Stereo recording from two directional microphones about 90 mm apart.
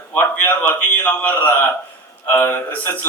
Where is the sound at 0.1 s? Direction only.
20° left (ahead or behind).